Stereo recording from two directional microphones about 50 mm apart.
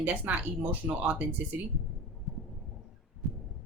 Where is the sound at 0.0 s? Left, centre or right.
Right.